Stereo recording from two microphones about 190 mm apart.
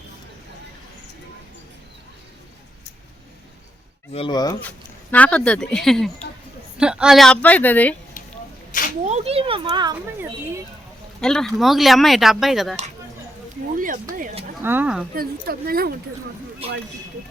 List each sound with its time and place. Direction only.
4.1 s speech: 25° left (ahead or behind)
5.1 s speech: 5° left (ahead or behind)
8.7 s speech: 45° left (ahead or behind)
9.0 s speech: 35° right (ahead or behind)
11.2 s speech: 5° left (ahead or behind)
13.7 s a sound: 45° right (ahead or behind)
14.6 s speech: 10° right (ahead or behind)
15.1 s a woman's voice: 50° right (ahead or behind)